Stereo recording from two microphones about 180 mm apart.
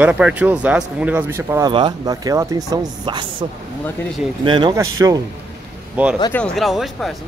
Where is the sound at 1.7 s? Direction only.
25° right (ahead or behind).